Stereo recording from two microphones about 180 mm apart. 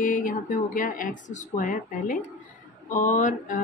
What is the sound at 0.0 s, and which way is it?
Speech, 45° left (ahead or behind).